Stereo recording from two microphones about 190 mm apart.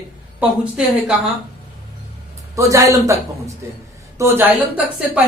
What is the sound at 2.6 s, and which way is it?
Speech, 15° right (ahead or behind).